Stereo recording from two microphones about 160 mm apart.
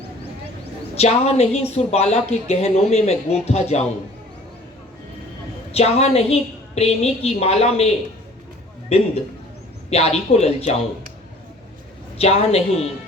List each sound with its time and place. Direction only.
0.9 s a woman's voice: 40° left (ahead or behind)
5.7 s a woman's voice: 40° left (ahead or behind)
9.9 s a woman's voice: 40° left (ahead or behind)
12.1 s a woman's voice: 40° left (ahead or behind)